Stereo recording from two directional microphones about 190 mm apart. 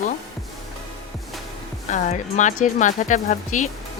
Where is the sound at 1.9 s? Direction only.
40° left (ahead or behind).